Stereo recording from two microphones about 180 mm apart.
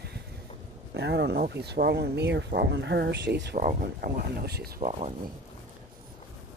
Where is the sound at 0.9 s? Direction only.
70° right (ahead or behind).